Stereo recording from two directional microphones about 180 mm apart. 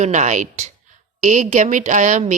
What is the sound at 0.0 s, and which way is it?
Speech, 40° right (ahead or behind).